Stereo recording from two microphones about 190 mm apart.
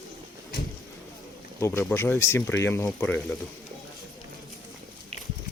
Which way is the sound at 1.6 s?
15° left (ahead or behind).